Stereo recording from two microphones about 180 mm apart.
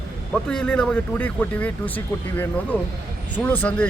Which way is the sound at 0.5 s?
5° left (ahead or behind).